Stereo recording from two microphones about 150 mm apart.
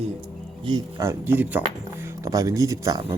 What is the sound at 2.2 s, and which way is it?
Speech, 25° right (ahead or behind).